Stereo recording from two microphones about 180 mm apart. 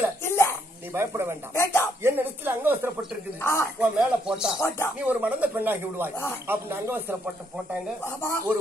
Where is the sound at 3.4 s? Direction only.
15° left (ahead or behind).